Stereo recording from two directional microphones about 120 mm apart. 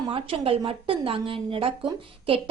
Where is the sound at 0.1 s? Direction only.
45° right (ahead or behind).